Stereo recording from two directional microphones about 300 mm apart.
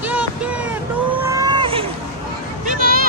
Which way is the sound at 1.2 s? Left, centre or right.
Centre.